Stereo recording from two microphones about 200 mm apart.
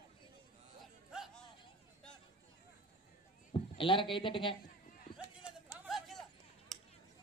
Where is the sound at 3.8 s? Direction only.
25° left (ahead or behind).